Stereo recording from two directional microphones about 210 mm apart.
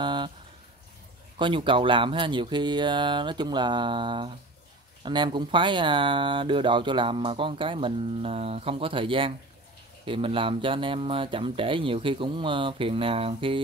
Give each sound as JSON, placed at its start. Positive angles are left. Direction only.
{"t": 0.0, "sound": "speech", "side_deg": -20}
{"t": 1.4, "sound": "speech", "side_deg": -25}